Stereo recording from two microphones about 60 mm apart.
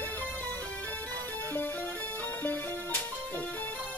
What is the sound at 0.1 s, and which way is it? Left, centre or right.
Music, left.